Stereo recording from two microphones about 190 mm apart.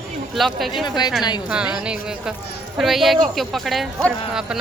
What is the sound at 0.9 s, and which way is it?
Speech, 20° left (ahead or behind).